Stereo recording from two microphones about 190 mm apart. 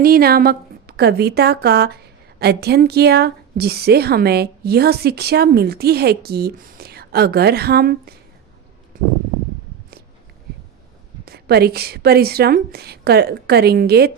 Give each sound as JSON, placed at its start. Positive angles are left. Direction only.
{"t": 0.0, "sound": "a woman's voice", "side_deg": -55}
{"t": 8.9, "sound": "a sound", "side_deg": -45}
{"t": 11.3, "sound": "a woman's voice", "side_deg": -55}